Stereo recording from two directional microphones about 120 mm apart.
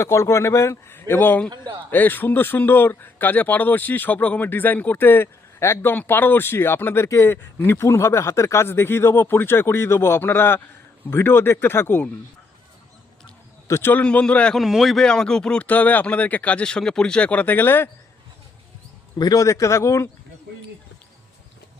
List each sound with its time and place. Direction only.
0.0 s speech: 25° left (ahead or behind)
13.7 s speech: 20° left (ahead or behind)
19.2 s speech: 30° left (ahead or behind)